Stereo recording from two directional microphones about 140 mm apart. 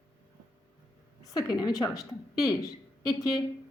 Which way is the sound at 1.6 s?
25° left (ahead or behind).